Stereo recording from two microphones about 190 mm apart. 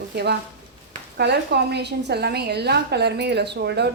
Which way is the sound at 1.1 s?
60° right (ahead or behind).